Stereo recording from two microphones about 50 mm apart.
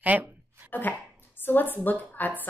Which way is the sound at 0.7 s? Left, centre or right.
Left.